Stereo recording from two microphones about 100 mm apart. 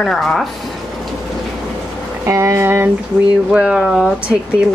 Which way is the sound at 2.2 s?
30° right (ahead or behind).